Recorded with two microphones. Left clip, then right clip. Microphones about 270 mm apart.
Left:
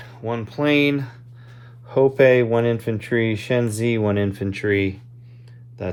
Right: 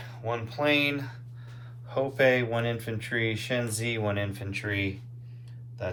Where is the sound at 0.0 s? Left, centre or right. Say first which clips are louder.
Left 5 dB; left.